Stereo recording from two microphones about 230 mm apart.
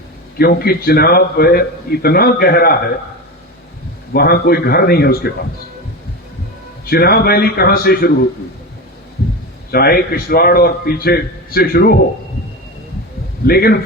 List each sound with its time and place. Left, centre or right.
0.3 s a man's voice: left
4.1 s a man's voice: left
6.8 s a man's voice: left
9.7 s a man's voice: left
13.5 s a man's voice: left